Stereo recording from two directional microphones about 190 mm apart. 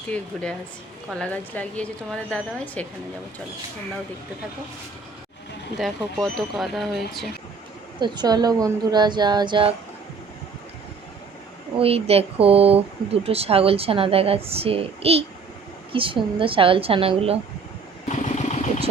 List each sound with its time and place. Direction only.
1.2 s a woman's voice: 5° left (ahead or behind)
5.7 s speech: centre (ahead or behind)
7.9 s speech: 25° right (ahead or behind)
11.8 s speech: 30° right (ahead or behind)
18.1 s vehicle: 35° left (ahead or behind)